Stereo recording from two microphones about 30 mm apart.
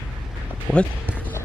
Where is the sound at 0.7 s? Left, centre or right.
Right.